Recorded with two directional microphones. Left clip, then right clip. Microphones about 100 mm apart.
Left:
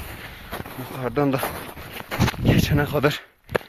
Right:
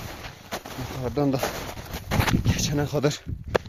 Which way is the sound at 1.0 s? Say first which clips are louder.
Left 3 dB; centre (ahead or behind).